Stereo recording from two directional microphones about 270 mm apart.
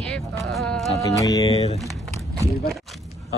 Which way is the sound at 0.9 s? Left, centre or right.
Centre.